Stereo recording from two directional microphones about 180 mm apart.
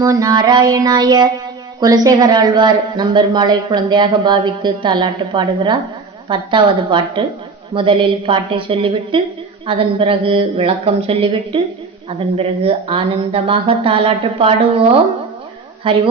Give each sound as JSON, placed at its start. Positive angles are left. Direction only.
{"t": 0.0, "sound": "a woman's voice", "side_deg": -20}